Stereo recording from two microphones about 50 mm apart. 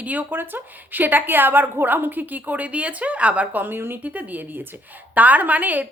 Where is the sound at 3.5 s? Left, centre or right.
Right.